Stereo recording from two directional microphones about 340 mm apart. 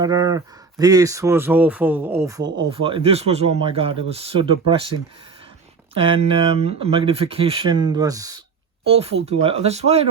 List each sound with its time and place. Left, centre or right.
0.0 s speech: centre